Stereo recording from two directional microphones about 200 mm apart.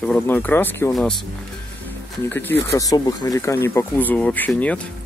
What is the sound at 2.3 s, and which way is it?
Speech, 10° left (ahead or behind).